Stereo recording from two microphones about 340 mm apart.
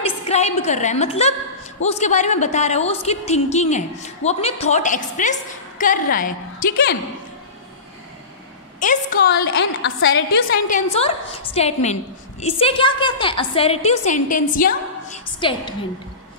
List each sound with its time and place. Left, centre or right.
0.0 s a woman's voice: centre
9.6 s a woman's voice: left; by 15.7 s centre